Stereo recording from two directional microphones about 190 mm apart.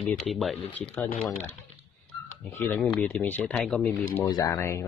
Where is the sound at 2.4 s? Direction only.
10° left (ahead or behind).